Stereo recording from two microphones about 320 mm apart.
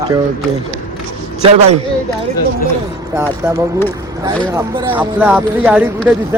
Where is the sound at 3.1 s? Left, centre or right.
Centre.